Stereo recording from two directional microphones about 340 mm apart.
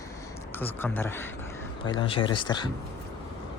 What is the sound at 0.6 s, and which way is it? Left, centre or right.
Speech, centre.